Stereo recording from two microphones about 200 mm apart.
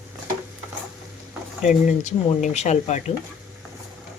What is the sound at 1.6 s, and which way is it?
Speech, 40° left (ahead or behind).